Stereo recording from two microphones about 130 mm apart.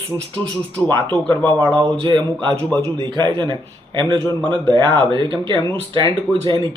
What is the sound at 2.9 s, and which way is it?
A man's voice, 35° right (ahead or behind).